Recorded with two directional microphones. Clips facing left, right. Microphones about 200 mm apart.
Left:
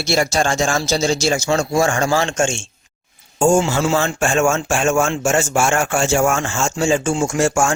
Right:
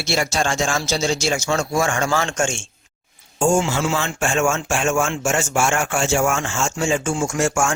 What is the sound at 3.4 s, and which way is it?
Speech, 40° left (ahead or behind).